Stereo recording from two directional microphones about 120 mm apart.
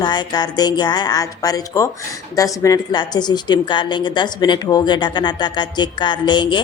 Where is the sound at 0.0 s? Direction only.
35° left (ahead or behind).